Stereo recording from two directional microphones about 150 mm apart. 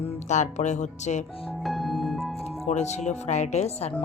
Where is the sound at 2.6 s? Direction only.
50° left (ahead or behind).